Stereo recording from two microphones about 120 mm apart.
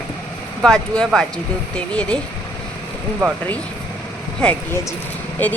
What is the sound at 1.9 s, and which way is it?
Speech, 10° left (ahead or behind).